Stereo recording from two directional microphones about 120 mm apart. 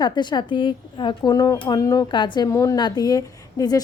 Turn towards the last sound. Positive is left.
turn(degrees=30)  # may be behind; listen again after turning